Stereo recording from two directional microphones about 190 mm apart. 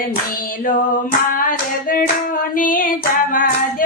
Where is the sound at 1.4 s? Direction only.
45° left (ahead or behind).